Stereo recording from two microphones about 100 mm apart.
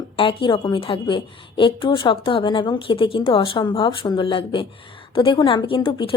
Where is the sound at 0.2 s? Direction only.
60° left (ahead or behind).